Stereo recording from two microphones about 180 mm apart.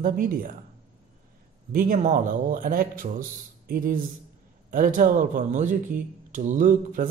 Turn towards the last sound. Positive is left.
turn(degrees=-45)  # may be behind; listen again after turning